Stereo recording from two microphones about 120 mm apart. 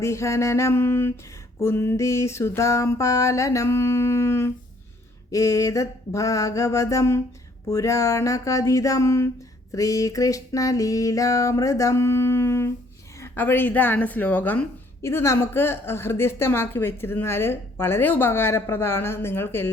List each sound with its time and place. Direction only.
0.0 s a woman's voice: 25° left (ahead or behind)